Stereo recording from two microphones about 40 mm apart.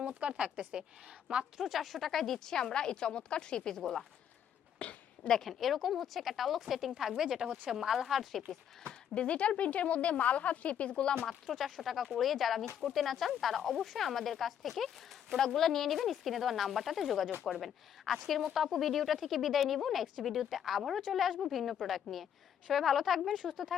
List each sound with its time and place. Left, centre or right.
0.0 s speech: right
1.5 s speech: centre
4.8 s a sound: left
5.5 s speech: centre
9.1 s speech: left
11.3 s speech: centre